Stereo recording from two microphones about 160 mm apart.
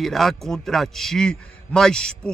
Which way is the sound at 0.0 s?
Centre (ahead or behind).